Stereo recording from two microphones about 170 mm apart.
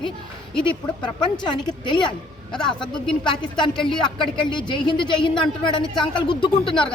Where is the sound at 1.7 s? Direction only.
25° left (ahead or behind).